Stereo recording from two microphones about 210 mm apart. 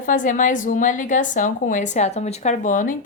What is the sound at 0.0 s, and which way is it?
A woman's voice, 40° left (ahead or behind).